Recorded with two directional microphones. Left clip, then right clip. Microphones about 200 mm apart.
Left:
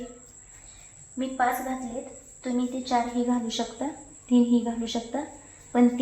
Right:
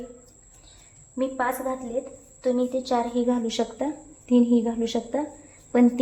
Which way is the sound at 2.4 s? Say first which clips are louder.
Right 6 dB; 60° right (ahead or behind).